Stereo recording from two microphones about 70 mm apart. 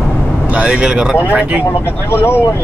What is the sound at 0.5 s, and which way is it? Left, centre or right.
Speech, centre.